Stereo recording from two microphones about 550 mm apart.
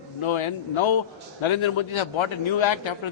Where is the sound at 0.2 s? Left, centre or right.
Left.